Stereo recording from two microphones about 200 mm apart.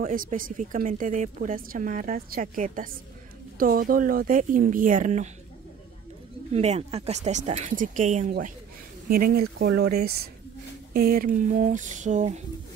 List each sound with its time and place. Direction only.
0.0 s speech: 45° right (ahead or behind)
6.5 s speech: 35° right (ahead or behind)